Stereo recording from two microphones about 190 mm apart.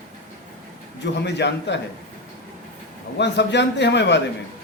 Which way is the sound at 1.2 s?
65° left (ahead or behind).